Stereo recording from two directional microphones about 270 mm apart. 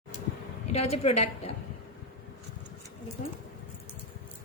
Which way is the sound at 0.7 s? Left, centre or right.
Left.